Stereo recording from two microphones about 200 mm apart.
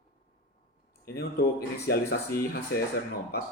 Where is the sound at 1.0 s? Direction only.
50° left (ahead or behind).